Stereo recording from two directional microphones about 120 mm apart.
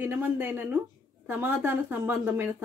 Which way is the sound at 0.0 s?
15° right (ahead or behind).